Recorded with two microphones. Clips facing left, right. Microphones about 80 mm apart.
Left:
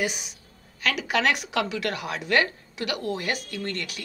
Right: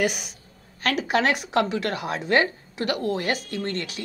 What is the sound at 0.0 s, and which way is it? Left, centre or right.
Speech, right.